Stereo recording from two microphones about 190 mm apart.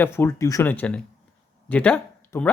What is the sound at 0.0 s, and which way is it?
Speech, 10° left (ahead or behind).